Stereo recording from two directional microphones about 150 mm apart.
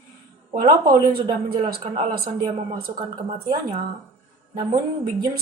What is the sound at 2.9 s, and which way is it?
Speech, 30° right (ahead or behind).